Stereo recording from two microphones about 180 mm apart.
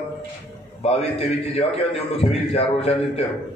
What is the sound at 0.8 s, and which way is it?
A man's voice, 35° left (ahead or behind).